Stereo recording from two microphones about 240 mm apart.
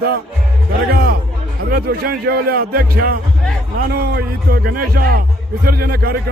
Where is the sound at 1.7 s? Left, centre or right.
Right.